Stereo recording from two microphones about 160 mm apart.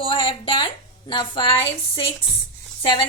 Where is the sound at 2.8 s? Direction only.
30° left (ahead or behind).